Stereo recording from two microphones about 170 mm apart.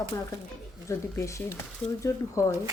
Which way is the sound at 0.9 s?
15° left (ahead or behind).